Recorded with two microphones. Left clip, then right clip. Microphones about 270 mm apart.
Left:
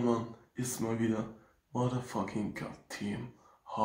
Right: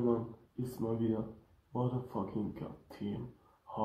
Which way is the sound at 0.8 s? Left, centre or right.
Left.